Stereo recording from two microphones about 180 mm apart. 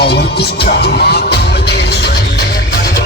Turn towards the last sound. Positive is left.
turn(degrees=60)  # may be behind; listen again after turning